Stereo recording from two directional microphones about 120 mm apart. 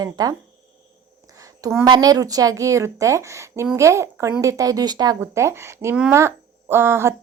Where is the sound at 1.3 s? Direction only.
30° right (ahead or behind).